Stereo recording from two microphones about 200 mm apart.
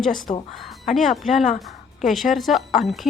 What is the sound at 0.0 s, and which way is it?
A woman's voice, centre (ahead or behind).